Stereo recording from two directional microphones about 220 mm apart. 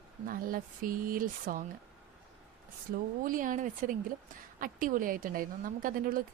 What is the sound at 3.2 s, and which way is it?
Speech, 35° right (ahead or behind).